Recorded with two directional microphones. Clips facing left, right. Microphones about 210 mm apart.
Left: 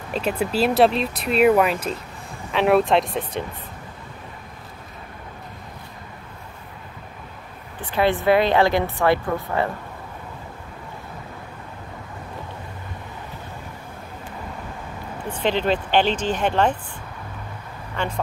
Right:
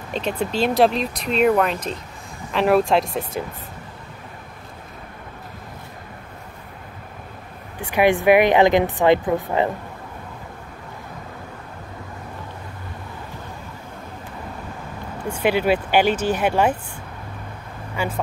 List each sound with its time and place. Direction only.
0.1 s speech: 5° left (ahead or behind)
7.8 s a woman's voice: 15° right (ahead or behind)
15.2 s a woman's voice: 10° right (ahead or behind)
17.9 s speech: 10° right (ahead or behind)